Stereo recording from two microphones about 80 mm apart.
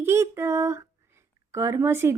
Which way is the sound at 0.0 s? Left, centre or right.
Right.